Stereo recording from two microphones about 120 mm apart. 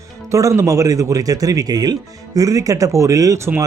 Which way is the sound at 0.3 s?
25° right (ahead or behind).